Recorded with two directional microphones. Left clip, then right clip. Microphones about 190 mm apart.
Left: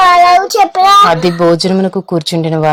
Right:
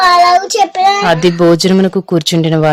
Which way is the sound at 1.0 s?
25° right (ahead or behind).